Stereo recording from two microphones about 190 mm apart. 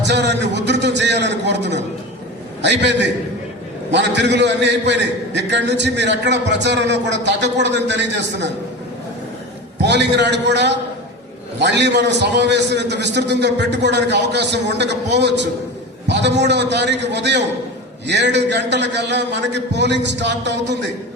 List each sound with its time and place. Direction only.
0.0 s a sound: 65° right (ahead or behind)
2.6 s a man's voice: 65° right (ahead or behind)
9.8 s a man's voice: 65° right (ahead or behind)